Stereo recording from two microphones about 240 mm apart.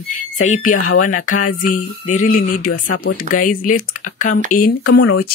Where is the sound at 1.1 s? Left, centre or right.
Left.